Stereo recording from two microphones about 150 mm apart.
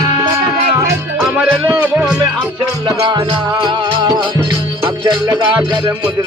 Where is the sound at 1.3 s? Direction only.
10° right (ahead or behind).